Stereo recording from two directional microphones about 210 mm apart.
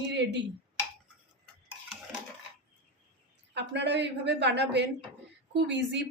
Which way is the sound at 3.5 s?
55° right (ahead or behind).